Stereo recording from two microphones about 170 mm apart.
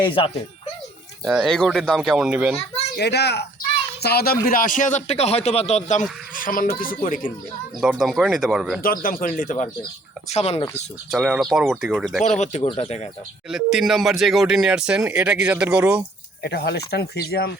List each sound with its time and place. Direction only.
0.0 s speech: 30° left (ahead or behind)
1.2 s speech: centre (ahead or behind)
2.9 s speech: 75° left (ahead or behind)
4.0 s speech: 65° left (ahead or behind)
4.4 s speech: 55° left (ahead or behind)
7.8 s speech: 5° right (ahead or behind)
8.8 s speech: 55° left (ahead or behind)
10.2 s speech: 40° left (ahead or behind)
11.1 s speech: 5° right (ahead or behind)
12.2 s speech: 45° left (ahead or behind)
12.6 s speech: 35° left (ahead or behind)
13.5 s speech: centre (ahead or behind)
16.4 s speech: 75° left (ahead or behind)